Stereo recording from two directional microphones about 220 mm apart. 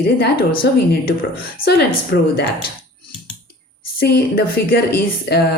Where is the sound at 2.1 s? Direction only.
50° left (ahead or behind).